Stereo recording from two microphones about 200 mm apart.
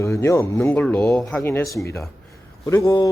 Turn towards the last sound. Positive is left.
turn(degrees=15)  # may be behind; listen again after turning